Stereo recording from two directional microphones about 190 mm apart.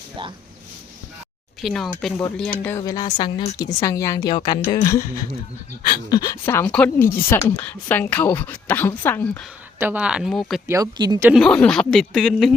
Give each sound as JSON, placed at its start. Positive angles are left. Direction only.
{"t": 1.6, "sound": "speech", "side_deg": 0}
{"t": 6.1, "sound": "speech", "side_deg": 20}
{"t": 9.8, "sound": "speech", "side_deg": -10}
{"t": 10.7, "sound": "speech", "side_deg": -20}
{"t": 11.3, "sound": "speech", "side_deg": 0}